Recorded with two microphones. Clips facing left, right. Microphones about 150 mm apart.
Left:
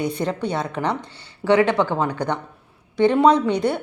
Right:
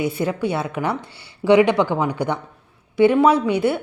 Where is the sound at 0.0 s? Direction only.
5° right (ahead or behind).